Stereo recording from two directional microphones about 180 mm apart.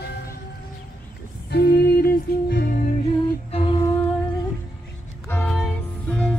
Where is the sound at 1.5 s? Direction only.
65° left (ahead or behind).